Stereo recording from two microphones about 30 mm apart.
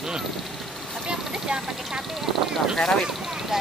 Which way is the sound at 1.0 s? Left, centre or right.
Right.